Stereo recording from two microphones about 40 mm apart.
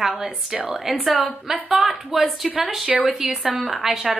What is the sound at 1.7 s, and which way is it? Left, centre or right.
A woman's voice, centre.